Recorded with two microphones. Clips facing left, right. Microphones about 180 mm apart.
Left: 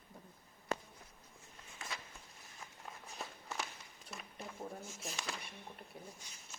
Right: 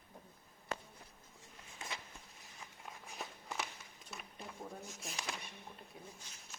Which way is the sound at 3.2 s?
Centre (ahead or behind).